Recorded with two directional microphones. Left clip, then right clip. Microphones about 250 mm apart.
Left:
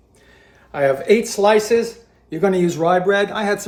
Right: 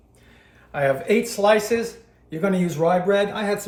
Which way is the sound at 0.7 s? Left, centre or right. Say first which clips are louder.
Left 5 dB; left.